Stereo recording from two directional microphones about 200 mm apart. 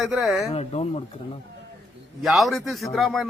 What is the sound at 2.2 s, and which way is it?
Speech, centre (ahead or behind).